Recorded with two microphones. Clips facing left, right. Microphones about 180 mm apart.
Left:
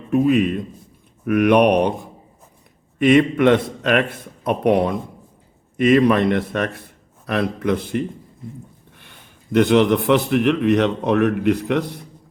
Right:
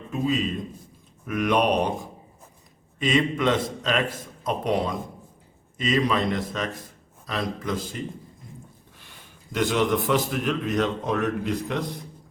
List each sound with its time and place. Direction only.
0.1 s a man's voice: 60° left (ahead or behind)
3.0 s a man's voice: 60° left (ahead or behind)
9.5 s a man's voice: 60° left (ahead or behind)